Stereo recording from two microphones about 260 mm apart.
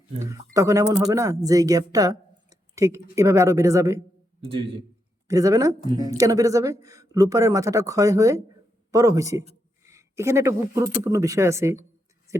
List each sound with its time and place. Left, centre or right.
0.2 s speech: centre
5.3 s speech: centre